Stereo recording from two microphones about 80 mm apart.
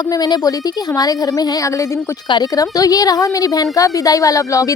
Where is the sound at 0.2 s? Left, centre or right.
Left.